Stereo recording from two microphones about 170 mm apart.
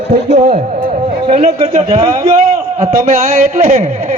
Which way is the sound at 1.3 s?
40° right (ahead or behind).